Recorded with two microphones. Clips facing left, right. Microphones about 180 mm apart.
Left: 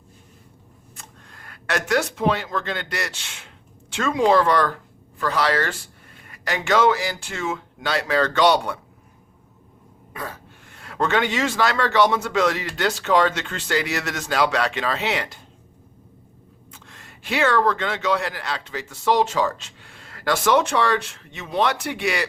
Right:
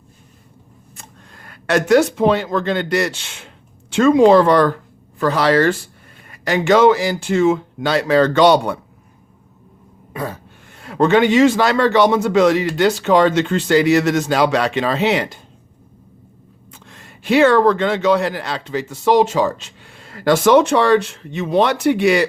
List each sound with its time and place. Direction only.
1.5 s speech: 25° right (ahead or behind)
10.1 s throat clearing: 25° right (ahead or behind)
10.8 s speech: 25° right (ahead or behind)
16.8 s speech: 30° right (ahead or behind)